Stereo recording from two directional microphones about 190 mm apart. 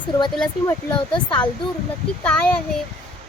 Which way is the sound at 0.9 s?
25° left (ahead or behind).